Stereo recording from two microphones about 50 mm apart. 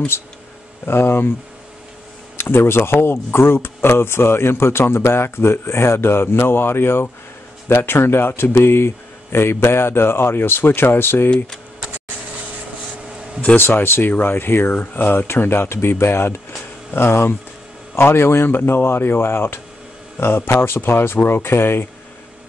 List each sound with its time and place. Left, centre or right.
0.8 s speech: left
2.3 s speech: left
13.6 s speech: left